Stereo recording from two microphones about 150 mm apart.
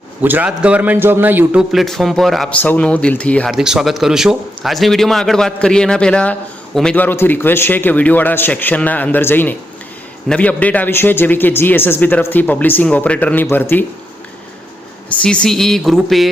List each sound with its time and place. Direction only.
0.2 s a man's voice: 10° right (ahead or behind)
1.7 s a man's voice: centre (ahead or behind)
3.5 s a man's voice: 5° right (ahead or behind); by 13.8 s 15° left (ahead or behind)
15.1 s a man's voice: 5° left (ahead or behind)